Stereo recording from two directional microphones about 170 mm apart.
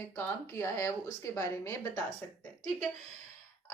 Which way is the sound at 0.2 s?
15° left (ahead or behind).